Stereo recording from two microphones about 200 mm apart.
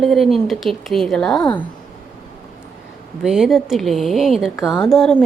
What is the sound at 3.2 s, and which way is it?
Speech, centre (ahead or behind).